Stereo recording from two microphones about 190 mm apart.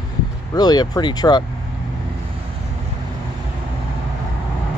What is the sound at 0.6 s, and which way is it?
Speech, 20° left (ahead or behind).